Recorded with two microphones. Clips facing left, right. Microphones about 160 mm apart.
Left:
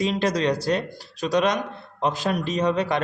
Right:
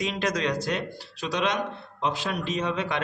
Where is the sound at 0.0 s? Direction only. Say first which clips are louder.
Left 5 dB; 35° left (ahead or behind).